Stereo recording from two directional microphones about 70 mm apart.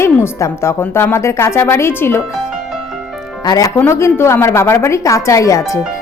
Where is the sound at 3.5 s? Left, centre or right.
Left.